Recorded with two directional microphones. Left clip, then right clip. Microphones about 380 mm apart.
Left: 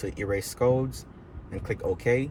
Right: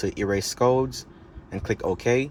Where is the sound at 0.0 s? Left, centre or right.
Centre.